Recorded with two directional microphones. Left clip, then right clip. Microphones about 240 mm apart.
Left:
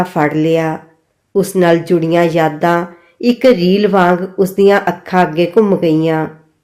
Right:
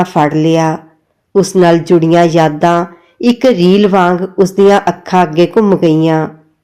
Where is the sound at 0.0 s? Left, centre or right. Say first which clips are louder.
Right 3 dB; right.